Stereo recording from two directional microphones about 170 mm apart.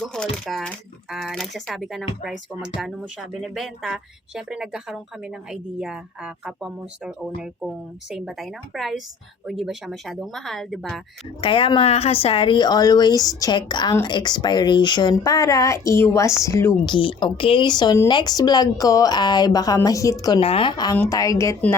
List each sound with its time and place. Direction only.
0.0 s speech: 5° left (ahead or behind)
11.3 s speech: 30° left (ahead or behind)
16.9 s speech: 30° left (ahead or behind)
20.4 s speech: 35° left (ahead or behind); by 21.8 s 15° left (ahead or behind)